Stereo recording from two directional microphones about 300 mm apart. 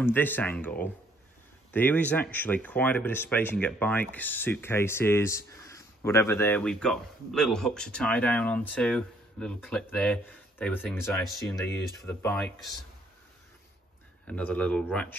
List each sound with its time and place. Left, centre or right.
0.0 s speech: centre
14.2 s speech: centre